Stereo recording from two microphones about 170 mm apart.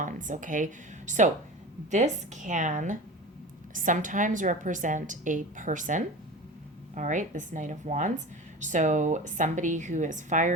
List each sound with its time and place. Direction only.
0.0 s a woman's voice: 50° right (ahead or behind)